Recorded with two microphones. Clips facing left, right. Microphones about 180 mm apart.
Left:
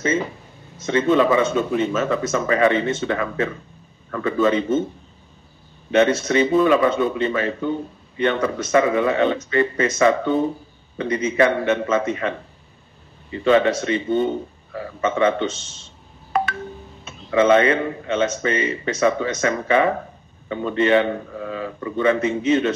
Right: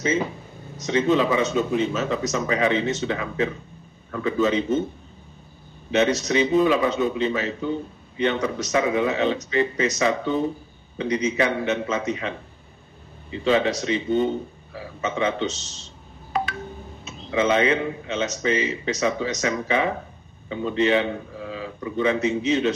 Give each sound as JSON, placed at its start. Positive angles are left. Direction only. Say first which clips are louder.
{"t": 0.8, "sound": "speech", "louder": "left 3 dB", "side_deg": 55}
{"t": 5.9, "sound": "speech", "louder": "left 4 dB", "side_deg": 55}
{"t": 17.0, "sound": "speech", "louder": "left 5 dB", "side_deg": 55}